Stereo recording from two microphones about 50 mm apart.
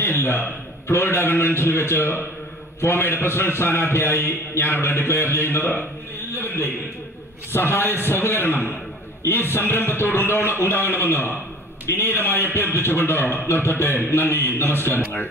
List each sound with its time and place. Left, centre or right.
0.0 s a man's voice: left